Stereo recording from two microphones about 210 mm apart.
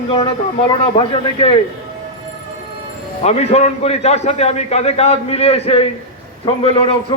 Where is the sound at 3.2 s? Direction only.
30° left (ahead or behind).